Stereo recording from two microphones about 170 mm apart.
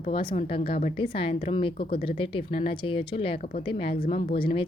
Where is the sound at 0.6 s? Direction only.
60° left (ahead or behind).